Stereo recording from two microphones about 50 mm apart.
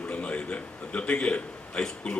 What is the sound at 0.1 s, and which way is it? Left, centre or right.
A man's voice, left.